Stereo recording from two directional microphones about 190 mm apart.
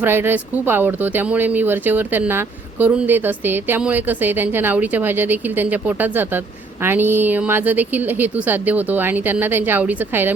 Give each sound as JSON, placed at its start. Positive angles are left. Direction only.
{"t": 0.0, "sound": "speech", "side_deg": -10}